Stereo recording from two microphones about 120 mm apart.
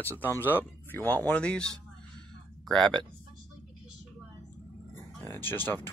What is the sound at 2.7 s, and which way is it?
Speech, 5° left (ahead or behind).